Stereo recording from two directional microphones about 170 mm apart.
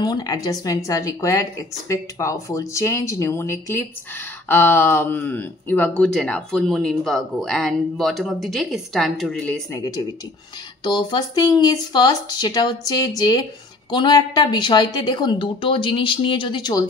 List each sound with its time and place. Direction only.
0.0 s speech: 25° left (ahead or behind); by 9.6 s 5° left (ahead or behind)
9.7 s speech: 20° left (ahead or behind)